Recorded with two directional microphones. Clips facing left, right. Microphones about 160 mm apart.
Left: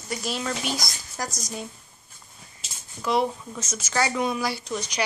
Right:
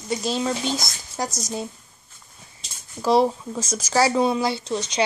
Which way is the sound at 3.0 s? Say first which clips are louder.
Right 6 dB; 35° right (ahead or behind).